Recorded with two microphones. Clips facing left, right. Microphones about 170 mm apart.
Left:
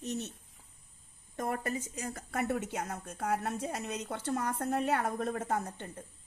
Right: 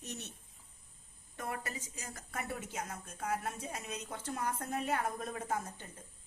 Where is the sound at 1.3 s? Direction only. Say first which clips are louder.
Left 7 dB; 45° left (ahead or behind).